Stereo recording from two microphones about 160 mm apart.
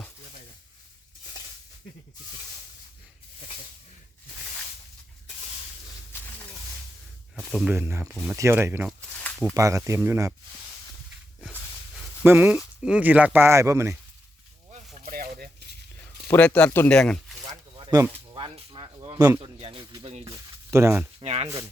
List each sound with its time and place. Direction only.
7.3 s speech: centre (ahead or behind)
7.7 s speech: 15° right (ahead or behind)
8.9 s a sound: 5° left (ahead or behind)
9.6 s speech: 20° right (ahead or behind)
12.2 s speech: 10° right (ahead or behind)
15.0 s a sound: 65° right (ahead or behind)
16.3 s speech: 10° left (ahead or behind)
17.4 s zipper: 30° right (ahead or behind)
18.3 s a sound: 30° right (ahead or behind)
19.4 s speech: 35° right (ahead or behind)
20.2 s speech: 20° right (ahead or behind)
21.2 s speech: 40° right (ahead or behind)